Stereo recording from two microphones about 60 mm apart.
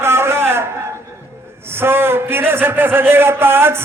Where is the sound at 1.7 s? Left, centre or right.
Right.